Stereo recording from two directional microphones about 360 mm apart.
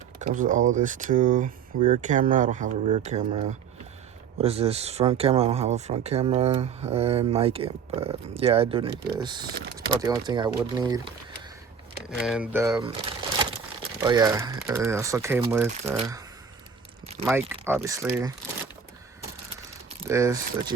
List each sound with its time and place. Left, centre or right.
0.2 s speech: right
9.6 s speech: right
10.0 s speech: centre
17.2 s speech: centre
20.1 s speech: centre